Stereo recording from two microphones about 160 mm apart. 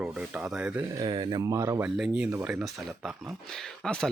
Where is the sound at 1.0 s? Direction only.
30° right (ahead or behind).